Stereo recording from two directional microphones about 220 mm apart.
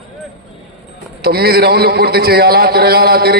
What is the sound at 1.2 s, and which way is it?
A man's voice, 45° right (ahead or behind).